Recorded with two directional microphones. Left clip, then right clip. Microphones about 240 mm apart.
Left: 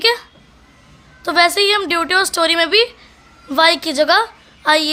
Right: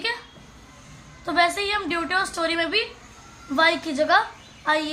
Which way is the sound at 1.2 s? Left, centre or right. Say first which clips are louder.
Left 8 dB; left.